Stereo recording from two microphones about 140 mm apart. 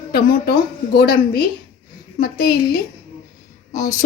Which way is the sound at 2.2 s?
90° left.